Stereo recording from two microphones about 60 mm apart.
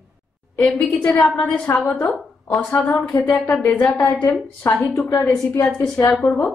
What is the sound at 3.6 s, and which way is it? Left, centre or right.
Speech, left.